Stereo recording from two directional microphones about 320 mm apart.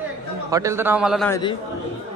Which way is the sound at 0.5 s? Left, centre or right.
Centre.